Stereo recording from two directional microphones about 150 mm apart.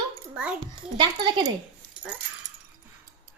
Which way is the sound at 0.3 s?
5° right (ahead or behind).